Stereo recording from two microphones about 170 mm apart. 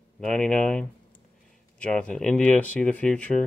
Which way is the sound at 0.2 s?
5° left (ahead or behind).